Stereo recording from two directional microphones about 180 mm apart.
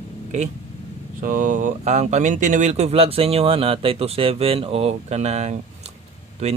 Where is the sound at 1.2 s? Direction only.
50° right (ahead or behind).